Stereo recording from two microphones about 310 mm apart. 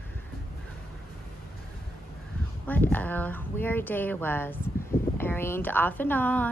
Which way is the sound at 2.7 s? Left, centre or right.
Centre.